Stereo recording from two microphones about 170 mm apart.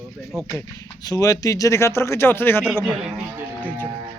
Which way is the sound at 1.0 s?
20° left (ahead or behind).